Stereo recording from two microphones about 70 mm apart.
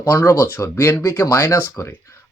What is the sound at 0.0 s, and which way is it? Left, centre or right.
Speech, left.